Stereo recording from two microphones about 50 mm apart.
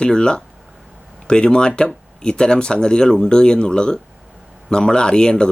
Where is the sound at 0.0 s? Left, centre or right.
Centre.